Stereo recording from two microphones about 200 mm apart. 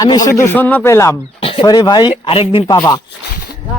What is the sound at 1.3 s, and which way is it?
Speech, 25° left (ahead or behind).